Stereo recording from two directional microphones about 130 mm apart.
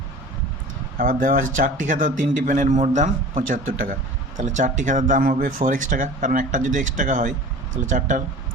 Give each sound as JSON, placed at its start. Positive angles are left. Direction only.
{"t": 0.9, "sound": "speech", "side_deg": -90}
{"t": 4.4, "sound": "speech", "side_deg": -70}